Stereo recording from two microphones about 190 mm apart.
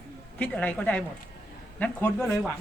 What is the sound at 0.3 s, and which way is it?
A woman's voice, 5° left (ahead or behind).